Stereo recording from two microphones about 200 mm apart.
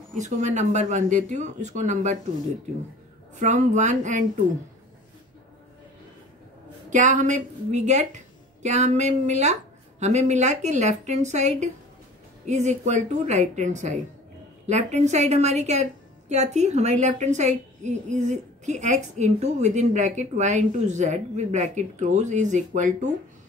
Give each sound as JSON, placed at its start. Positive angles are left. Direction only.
{"t": 0.2, "sound": "a woman's voice", "side_deg": -35}
{"t": 3.3, "sound": "a woman's voice", "side_deg": -35}
{"t": 6.9, "sound": "a woman's voice", "side_deg": -40}